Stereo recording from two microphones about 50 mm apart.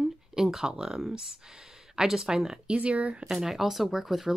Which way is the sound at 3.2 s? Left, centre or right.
Centre.